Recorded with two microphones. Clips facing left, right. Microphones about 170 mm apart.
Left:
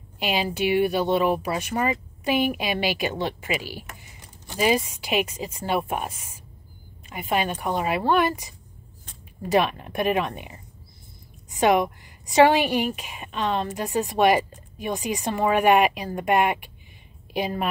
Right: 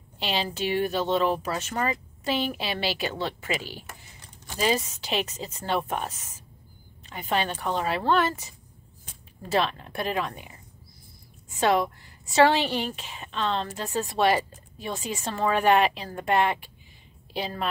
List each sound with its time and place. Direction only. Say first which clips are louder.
0.2 s a woman's voice: left 4 dB; 10° left (ahead or behind)